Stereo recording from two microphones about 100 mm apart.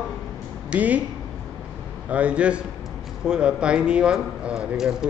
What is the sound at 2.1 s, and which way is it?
Speech, 10° right (ahead or behind).